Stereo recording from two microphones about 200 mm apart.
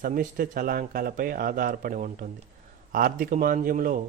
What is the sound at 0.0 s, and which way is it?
Speech, 45° right (ahead or behind).